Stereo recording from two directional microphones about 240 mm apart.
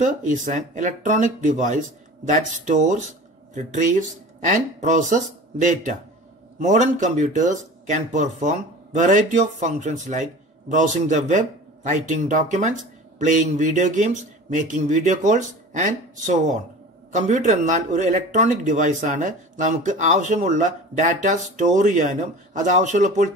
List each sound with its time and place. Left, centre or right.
0.0 s speech: right